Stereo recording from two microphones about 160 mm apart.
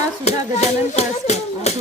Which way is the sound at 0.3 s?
45° left (ahead or behind).